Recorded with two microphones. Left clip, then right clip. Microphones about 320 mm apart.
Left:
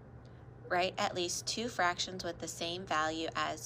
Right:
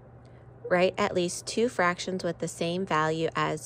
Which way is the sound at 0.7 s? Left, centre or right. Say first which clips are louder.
Right 8 dB; centre.